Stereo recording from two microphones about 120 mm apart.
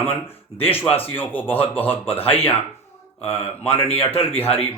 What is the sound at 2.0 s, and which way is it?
Speech, 50° left (ahead or behind).